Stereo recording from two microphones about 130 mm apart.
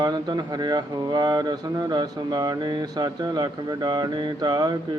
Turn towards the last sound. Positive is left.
turn(degrees=-30)  # may be behind; listen again after turning